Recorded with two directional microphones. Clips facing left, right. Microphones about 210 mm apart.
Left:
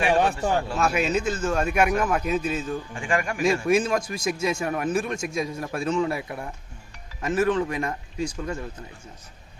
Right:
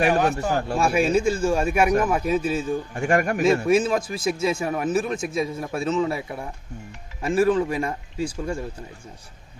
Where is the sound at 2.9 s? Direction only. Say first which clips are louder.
Right 7 dB; 45° right (ahead or behind).